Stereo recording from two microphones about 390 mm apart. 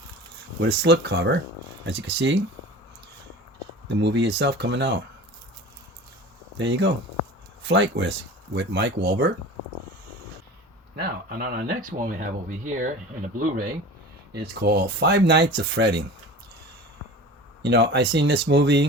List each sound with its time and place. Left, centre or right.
0.6 s speech: right
3.8 s speech: right
6.6 s speech: right
10.9 s speech: right
17.6 s speech: right